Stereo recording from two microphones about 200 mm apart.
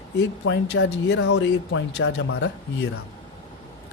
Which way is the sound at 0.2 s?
65° left (ahead or behind).